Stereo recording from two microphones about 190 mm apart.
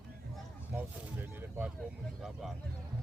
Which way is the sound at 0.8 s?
10° right (ahead or behind).